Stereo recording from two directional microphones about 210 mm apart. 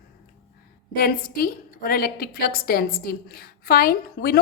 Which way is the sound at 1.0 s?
45° left (ahead or behind).